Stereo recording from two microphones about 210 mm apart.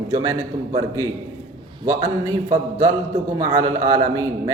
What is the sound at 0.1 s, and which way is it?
Speech, 15° right (ahead or behind).